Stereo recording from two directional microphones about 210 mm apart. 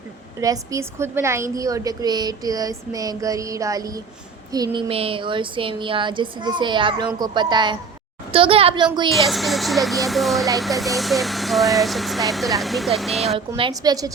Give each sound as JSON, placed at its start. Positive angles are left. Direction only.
{"t": 0.3, "sound": "a woman's voice", "side_deg": -15}
{"t": 9.1, "sound": "speech", "side_deg": 0}
{"t": 13.6, "sound": "speech", "side_deg": -20}